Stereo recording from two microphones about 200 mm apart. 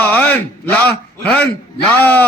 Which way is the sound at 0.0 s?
5° left (ahead or behind).